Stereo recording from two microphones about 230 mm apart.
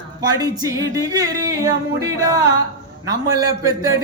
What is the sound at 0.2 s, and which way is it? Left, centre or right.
Singing, centre.